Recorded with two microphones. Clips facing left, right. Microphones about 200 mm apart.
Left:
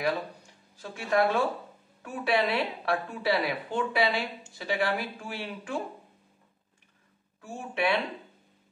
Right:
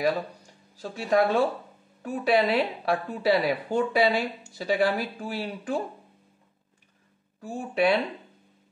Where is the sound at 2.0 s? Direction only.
40° right (ahead or behind).